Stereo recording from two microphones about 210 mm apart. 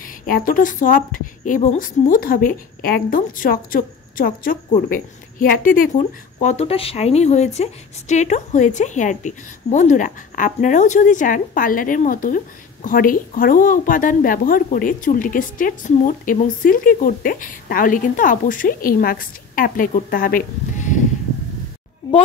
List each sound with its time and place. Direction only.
0.0 s a woman's voice: 40° left (ahead or behind)